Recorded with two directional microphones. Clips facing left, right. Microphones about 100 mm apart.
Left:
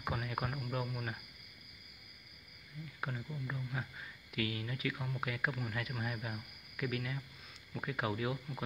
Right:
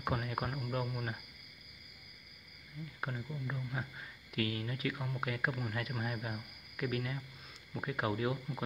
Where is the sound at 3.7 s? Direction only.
35° right (ahead or behind).